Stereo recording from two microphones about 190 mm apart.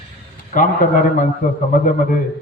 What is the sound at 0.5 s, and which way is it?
A man's voice, 45° left (ahead or behind).